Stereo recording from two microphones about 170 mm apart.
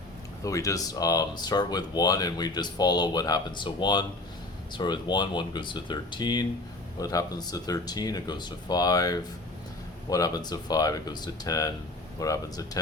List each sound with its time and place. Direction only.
0.4 s speech: 20° left (ahead or behind)